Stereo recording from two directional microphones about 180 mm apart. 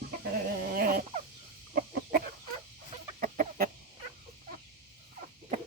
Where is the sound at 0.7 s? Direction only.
55° right (ahead or behind).